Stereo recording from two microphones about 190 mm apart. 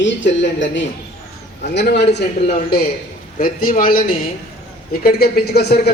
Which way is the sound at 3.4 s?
50° left (ahead or behind).